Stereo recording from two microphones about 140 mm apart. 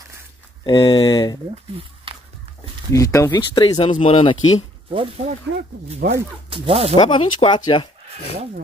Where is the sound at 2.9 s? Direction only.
20° left (ahead or behind).